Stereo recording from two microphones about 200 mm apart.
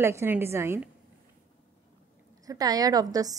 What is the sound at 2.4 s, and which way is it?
Speech, 20° right (ahead or behind).